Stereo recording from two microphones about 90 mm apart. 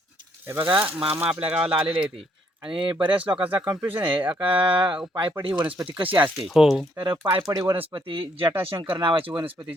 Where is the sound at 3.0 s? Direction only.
75° right (ahead or behind).